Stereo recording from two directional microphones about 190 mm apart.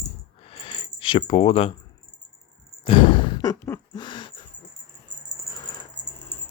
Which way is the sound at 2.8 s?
25° left (ahead or behind).